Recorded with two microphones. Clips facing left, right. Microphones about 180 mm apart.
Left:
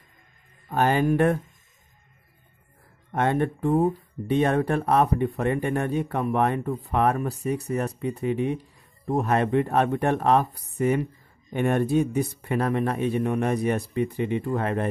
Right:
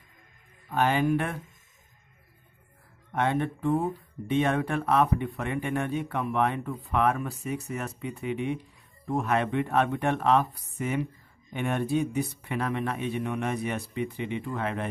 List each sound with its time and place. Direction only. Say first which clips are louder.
0.7 s speech: left 3 dB; 40° left (ahead or behind)
3.1 s speech: left 3 dB; 45° left (ahead or behind)